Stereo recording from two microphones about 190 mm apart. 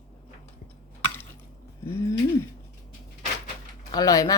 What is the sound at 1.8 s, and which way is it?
Bird, 15° left (ahead or behind).